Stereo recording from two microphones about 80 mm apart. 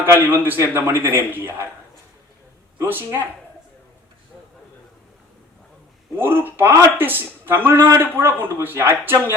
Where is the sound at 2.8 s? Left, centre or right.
Right.